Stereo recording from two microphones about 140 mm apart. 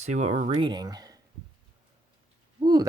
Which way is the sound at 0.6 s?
30° right (ahead or behind).